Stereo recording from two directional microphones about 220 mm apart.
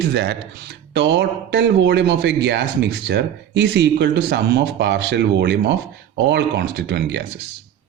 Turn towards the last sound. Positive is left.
turn(degrees=-50)  # may be behind; listen again after turning